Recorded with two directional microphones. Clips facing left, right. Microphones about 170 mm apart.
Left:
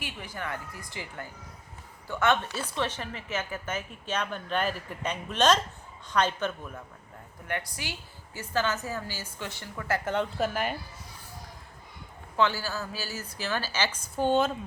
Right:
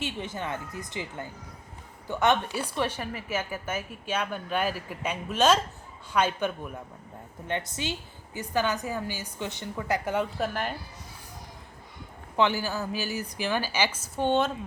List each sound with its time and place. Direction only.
0.0 s speech: 25° right (ahead or behind)
7.4 s speech: 25° right (ahead or behind)
10.2 s a woman's voice: centre (ahead or behind)
12.4 s speech: 15° right (ahead or behind); by 14.5 s centre (ahead or behind)